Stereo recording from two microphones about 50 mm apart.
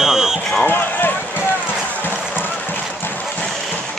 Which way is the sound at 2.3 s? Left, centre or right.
Left.